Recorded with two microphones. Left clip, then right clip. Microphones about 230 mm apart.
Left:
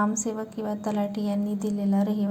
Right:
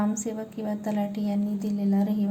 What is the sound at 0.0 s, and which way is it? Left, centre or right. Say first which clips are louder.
A woman's voice: left 3 dB; centre.